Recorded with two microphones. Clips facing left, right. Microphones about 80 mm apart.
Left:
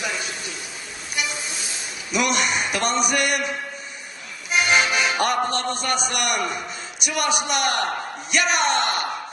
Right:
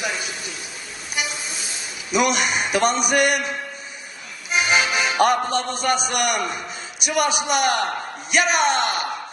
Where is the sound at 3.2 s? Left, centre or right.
Centre.